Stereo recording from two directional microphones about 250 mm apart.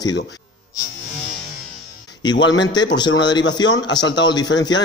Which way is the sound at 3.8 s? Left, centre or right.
Centre.